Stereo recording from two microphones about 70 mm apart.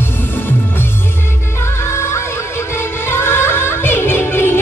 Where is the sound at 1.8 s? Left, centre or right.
Left.